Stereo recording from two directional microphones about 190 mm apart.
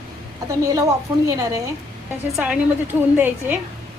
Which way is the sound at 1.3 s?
15° right (ahead or behind).